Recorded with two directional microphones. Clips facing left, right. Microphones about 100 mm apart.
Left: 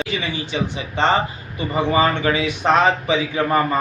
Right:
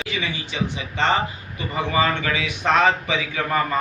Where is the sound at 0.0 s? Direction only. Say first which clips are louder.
Left 3 dB; 35° left (ahead or behind).